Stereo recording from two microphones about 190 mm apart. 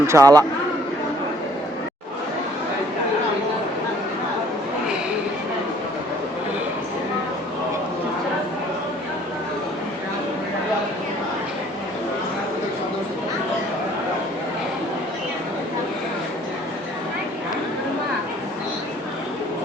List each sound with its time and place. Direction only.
0.0 s speech: 15° right (ahead or behind)